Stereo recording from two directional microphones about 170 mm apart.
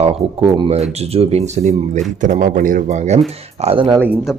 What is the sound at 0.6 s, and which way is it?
Speech, 35° right (ahead or behind).